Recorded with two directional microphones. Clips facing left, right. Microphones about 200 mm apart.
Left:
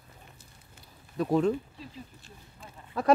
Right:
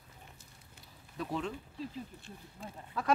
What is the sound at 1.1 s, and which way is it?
Speech, 45° left (ahead or behind).